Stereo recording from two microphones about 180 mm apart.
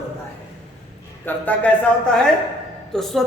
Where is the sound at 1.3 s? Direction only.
10° left (ahead or behind).